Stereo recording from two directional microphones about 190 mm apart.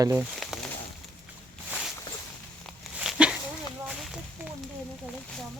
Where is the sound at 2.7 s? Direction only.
5° right (ahead or behind).